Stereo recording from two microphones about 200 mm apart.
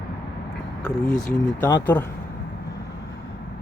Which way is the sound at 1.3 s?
10° left (ahead or behind).